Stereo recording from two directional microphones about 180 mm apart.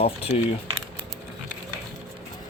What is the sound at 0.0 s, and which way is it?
Speech, 30° left (ahead or behind).